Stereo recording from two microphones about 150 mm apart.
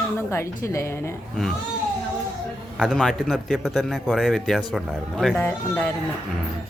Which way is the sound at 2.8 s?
Centre (ahead or behind).